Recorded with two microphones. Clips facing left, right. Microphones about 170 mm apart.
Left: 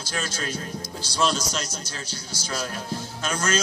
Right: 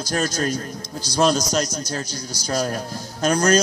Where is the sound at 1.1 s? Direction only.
40° right (ahead or behind).